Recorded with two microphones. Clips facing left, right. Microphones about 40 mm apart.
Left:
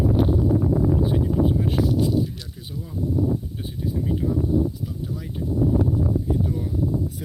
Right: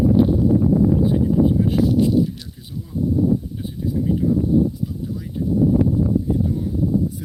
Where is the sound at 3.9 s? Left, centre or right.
Centre.